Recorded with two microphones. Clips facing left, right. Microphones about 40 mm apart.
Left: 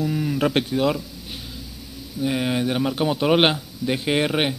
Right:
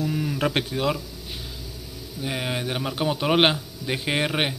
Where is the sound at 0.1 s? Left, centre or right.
Centre.